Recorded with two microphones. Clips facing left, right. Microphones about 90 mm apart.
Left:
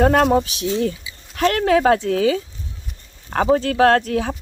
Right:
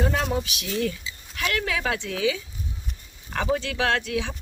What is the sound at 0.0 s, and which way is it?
Speech, 55° left (ahead or behind).